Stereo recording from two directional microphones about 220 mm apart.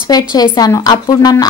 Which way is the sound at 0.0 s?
20° left (ahead or behind).